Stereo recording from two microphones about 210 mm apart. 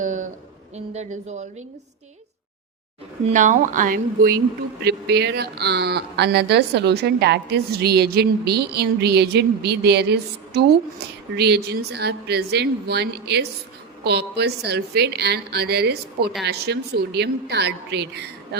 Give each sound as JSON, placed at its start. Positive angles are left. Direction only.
{"t": 0.0, "sound": "a sound", "side_deg": -35}
{"t": 0.9, "sound": "speech", "side_deg": -35}
{"t": 3.2, "sound": "speech", "side_deg": -35}